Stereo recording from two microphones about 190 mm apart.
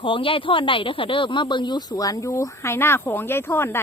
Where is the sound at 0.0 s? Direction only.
25° left (ahead or behind).